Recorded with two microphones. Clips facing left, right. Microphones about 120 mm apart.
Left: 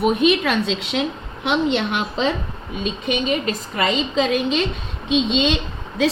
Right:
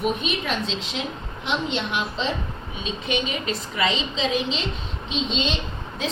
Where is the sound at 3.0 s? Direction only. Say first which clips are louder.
Left 5 dB; 45° left (ahead or behind).